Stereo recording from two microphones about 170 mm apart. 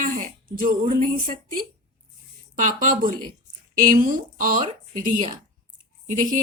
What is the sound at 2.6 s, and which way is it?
Speech, 50° right (ahead or behind).